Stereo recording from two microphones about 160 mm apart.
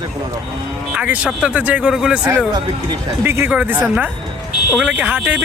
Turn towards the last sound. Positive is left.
turn(degrees=-10)  # may be behind; listen again after turning